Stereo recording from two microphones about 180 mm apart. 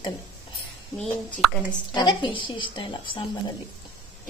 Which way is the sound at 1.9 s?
25° left (ahead or behind).